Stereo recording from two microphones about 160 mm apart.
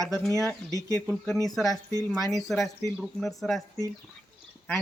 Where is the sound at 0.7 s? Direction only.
20° left (ahead or behind).